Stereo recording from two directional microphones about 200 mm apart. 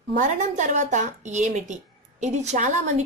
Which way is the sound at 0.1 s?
40° right (ahead or behind).